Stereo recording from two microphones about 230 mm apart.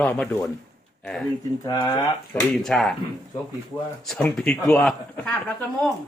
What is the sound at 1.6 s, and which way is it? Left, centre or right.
Speech, centre.